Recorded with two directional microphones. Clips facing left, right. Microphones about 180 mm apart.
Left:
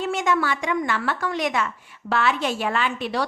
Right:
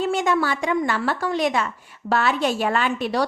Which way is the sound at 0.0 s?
35° right (ahead or behind).